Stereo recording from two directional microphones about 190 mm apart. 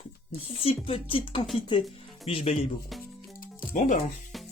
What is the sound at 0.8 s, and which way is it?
Speech, 30° left (ahead or behind).